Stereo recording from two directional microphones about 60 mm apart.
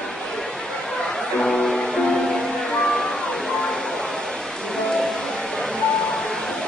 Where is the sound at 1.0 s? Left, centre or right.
Centre.